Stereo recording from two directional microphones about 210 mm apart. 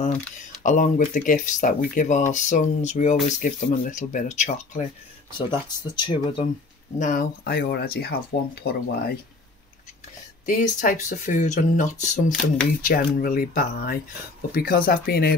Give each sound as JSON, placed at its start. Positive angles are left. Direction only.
{"t": 0.0, "sound": "speech", "side_deg": 35}
{"t": 5.5, "sound": "speech", "side_deg": 25}
{"t": 7.0, "sound": "speech", "side_deg": 40}
{"t": 10.4, "sound": "speech", "side_deg": 40}